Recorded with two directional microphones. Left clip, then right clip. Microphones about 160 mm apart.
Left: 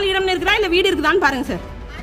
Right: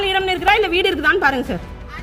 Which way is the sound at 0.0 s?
15° left (ahead or behind).